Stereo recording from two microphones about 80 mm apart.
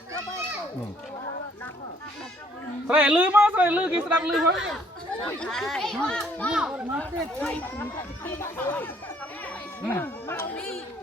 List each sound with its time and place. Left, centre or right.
2.8 s speech: centre
4.4 s speech: centre
5.2 s a child's voice: centre
6.5 s speech: centre
7.0 s speech: centre